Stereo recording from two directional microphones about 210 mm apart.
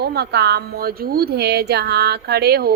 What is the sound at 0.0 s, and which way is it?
Speech, 50° right (ahead or behind).